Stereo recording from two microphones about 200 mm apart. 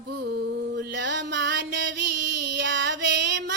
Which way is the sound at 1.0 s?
60° right (ahead or behind).